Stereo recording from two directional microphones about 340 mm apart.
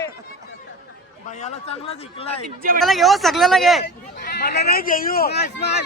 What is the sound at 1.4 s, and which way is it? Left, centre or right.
Speech, centre.